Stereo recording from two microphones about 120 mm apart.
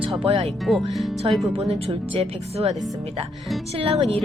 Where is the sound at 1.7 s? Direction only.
55° right (ahead or behind).